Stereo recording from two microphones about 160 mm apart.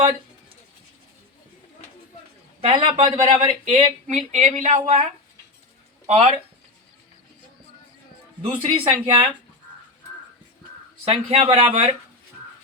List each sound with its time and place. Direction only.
2.6 s a man's voice: 35° right (ahead or behind)
3.2 s a woman's voice: 45° right (ahead or behind)
6.1 s a man's voice: 35° right (ahead or behind)
8.4 s a man's voice: 35° right (ahead or behind)
11.0 s a man's voice: 40° right (ahead or behind)